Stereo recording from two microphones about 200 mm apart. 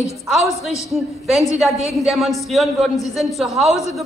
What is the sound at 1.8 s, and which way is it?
A woman's voice, centre (ahead or behind).